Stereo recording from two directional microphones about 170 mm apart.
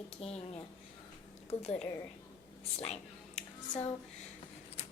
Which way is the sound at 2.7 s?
40° left (ahead or behind).